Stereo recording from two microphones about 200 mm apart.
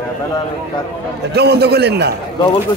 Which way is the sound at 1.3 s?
55° right (ahead or behind).